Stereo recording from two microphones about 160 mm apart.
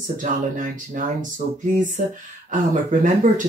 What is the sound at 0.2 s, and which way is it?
Speech, 55° right (ahead or behind).